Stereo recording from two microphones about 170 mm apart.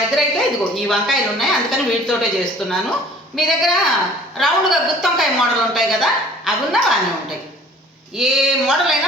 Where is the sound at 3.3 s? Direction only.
Centre (ahead or behind).